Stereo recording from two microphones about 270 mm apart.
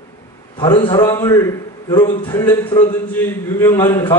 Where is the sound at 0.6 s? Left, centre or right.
Centre.